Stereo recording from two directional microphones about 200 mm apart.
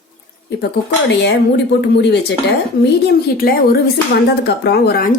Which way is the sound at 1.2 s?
60° left (ahead or behind).